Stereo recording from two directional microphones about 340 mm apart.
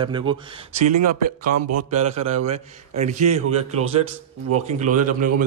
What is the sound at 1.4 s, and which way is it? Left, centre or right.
Speech, right.